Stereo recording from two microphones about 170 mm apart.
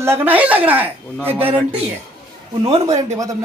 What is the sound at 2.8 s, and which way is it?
Speech, 20° right (ahead or behind).